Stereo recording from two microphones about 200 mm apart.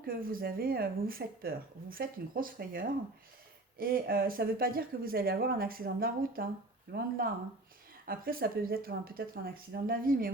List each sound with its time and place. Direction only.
0.0 s speech: 45° right (ahead or behind)